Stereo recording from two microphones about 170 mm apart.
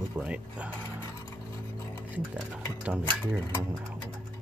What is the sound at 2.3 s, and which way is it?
Speech, 5° right (ahead or behind).